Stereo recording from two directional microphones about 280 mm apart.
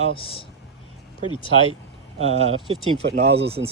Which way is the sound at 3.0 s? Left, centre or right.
Right.